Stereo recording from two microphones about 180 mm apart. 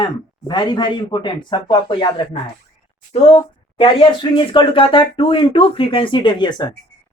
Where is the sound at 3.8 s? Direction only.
25° left (ahead or behind).